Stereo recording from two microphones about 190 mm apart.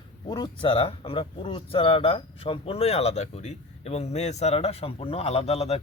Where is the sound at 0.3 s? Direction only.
25° left (ahead or behind).